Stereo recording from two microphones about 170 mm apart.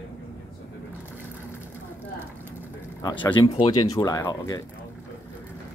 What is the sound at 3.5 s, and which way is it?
Speech, 30° left (ahead or behind).